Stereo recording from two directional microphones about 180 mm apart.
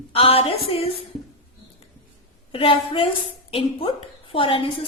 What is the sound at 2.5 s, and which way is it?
Speech, 30° left (ahead or behind).